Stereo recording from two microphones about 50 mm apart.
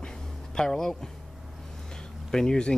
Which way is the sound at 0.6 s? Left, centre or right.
Centre.